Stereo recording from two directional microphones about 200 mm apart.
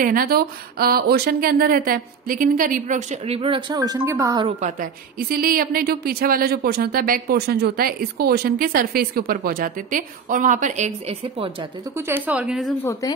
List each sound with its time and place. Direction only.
0.0 s a woman's voice: 45° right (ahead or behind)
3.3 s speech: 25° right (ahead or behind)
4.5 s a woman's voice: 35° right (ahead or behind)
5.3 s a woman's voice: 45° right (ahead or behind); by 11.5 s 30° right (ahead or behind)
12.1 s a woman's voice: 5° right (ahead or behind)